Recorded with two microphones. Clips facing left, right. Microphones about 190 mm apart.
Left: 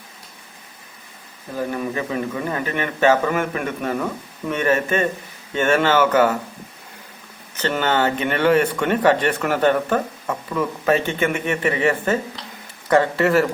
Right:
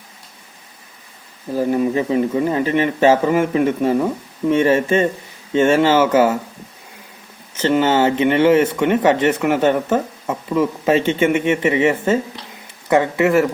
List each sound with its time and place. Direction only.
1.5 s speech: 25° right (ahead or behind)
7.6 s speech: 25° right (ahead or behind)